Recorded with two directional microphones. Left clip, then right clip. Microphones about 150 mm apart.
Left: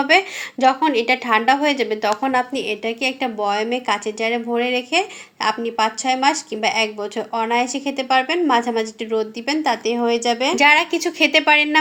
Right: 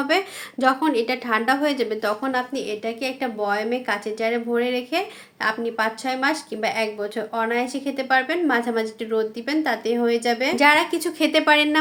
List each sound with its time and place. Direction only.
0.6 s a woman's voice: 5° right (ahead or behind)
2.3 s a woman's voice: 25° left (ahead or behind)
10.5 s a woman's voice: centre (ahead or behind)